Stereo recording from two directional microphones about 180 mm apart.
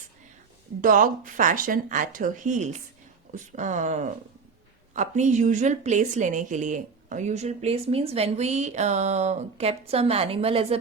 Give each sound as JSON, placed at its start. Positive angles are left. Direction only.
{"t": 0.8, "sound": "a woman's voice", "side_deg": -50}